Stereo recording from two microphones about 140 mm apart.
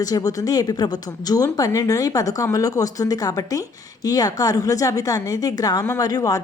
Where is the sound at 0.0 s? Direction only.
25° left (ahead or behind).